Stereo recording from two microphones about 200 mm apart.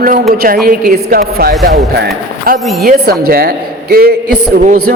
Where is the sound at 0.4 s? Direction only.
45° right (ahead or behind).